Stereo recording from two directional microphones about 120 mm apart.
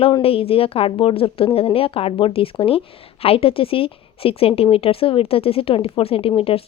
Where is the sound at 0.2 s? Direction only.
50° left (ahead or behind).